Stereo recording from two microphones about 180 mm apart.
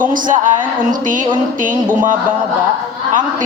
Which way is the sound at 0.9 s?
45° right (ahead or behind).